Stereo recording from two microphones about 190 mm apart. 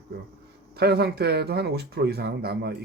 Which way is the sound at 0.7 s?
55° right (ahead or behind).